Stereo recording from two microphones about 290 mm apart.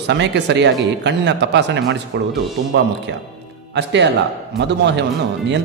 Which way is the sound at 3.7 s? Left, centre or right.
Right.